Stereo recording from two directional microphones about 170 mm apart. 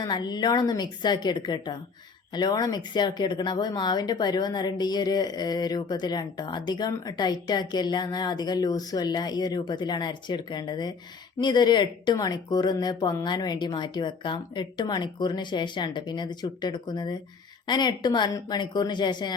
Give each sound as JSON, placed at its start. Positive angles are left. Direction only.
{"t": 0.0, "sound": "speech", "side_deg": 25}